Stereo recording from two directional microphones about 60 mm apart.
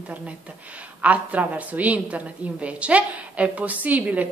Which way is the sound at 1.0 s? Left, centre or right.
Right.